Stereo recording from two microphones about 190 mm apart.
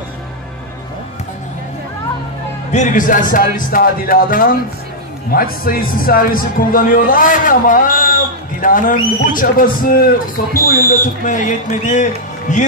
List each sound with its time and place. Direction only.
2.7 s speech: 40° left (ahead or behind)